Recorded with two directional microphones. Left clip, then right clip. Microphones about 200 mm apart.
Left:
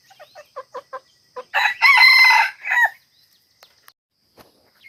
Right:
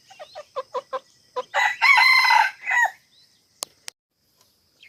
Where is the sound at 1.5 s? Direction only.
40° left (ahead or behind).